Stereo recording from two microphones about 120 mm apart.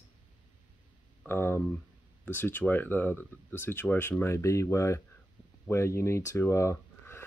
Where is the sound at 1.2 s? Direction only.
20° left (ahead or behind).